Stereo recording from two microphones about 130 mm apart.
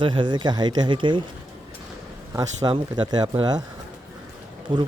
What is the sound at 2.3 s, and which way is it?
Speech, 30° right (ahead or behind).